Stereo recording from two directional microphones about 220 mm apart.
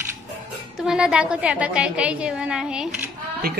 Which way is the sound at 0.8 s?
5° right (ahead or behind).